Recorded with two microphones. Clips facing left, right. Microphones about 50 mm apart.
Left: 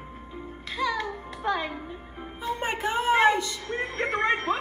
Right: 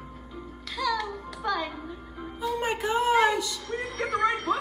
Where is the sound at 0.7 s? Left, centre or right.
Left.